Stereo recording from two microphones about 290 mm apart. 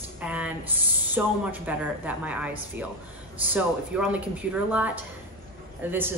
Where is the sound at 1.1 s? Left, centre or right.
Centre.